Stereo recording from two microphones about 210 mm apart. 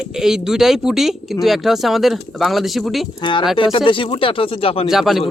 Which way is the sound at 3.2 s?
20° left (ahead or behind).